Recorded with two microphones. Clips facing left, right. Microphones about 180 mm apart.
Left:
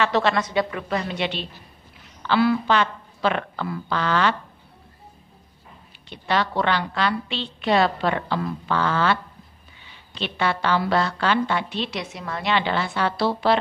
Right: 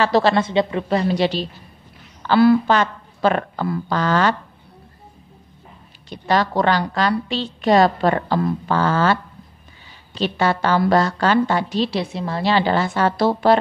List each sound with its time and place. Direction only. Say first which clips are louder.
0.0 s a woman's voice: right 5 dB; 35° right (ahead or behind)
6.0 s a woman's voice: right 4 dB; 40° right (ahead or behind)